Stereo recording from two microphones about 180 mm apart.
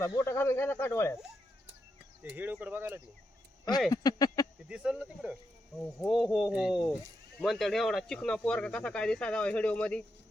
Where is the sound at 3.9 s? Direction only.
20° left (ahead or behind).